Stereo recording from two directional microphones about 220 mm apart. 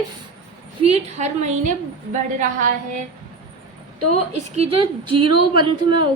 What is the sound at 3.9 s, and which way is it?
Speech, 90° right.